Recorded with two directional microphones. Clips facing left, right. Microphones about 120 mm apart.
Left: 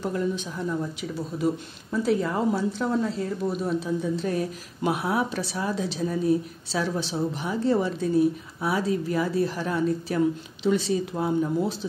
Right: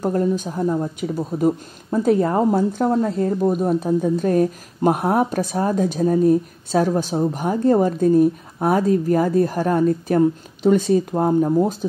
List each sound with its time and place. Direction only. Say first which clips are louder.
0.0 s a woman's voice: right 7 dB; 45° right (ahead or behind)